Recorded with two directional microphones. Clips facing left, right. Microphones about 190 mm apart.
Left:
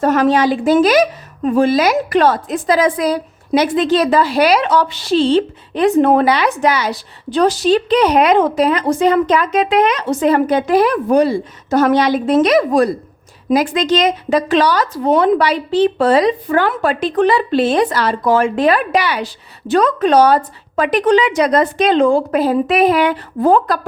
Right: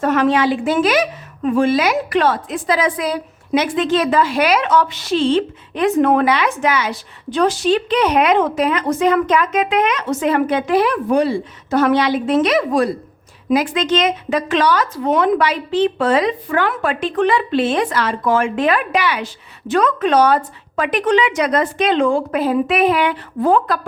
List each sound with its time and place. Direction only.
0.0 s a woman's voice: 40° left (ahead or behind)